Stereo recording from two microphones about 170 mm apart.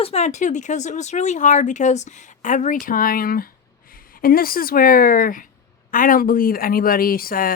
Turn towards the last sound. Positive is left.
turn(degrees=55)  # may be behind; listen again after turning